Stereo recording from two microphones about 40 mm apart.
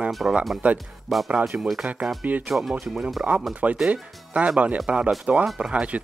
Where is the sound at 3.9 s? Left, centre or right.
Right.